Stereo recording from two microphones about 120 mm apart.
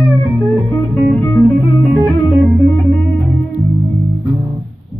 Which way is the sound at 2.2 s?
Centre (ahead or behind).